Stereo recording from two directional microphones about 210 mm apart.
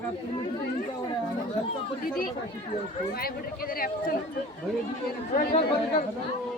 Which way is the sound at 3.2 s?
45° left (ahead or behind).